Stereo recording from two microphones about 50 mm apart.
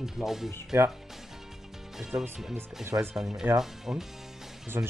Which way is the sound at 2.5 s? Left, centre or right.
Right.